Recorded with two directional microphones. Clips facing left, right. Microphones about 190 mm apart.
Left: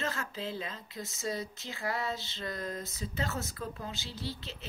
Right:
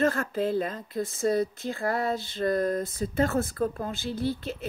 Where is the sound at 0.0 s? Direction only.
55° right (ahead or behind).